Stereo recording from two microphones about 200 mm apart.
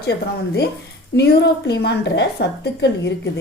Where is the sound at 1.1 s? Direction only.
55° left (ahead or behind).